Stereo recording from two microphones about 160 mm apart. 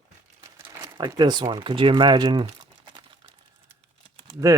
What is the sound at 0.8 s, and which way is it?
Speech, 30° right (ahead or behind).